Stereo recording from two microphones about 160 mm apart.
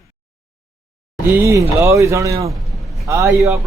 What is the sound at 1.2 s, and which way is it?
A man's voice, 15° right (ahead or behind).